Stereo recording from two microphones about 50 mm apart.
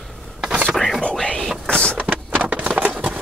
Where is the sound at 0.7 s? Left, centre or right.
Centre.